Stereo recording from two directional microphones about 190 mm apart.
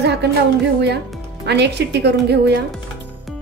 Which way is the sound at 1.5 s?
60° right (ahead or behind).